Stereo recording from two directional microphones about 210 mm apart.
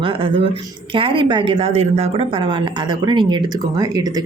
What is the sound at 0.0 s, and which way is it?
A woman's voice, 25° right (ahead or behind).